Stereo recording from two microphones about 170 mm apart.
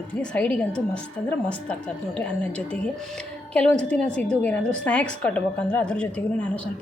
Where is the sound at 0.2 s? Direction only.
10° left (ahead or behind).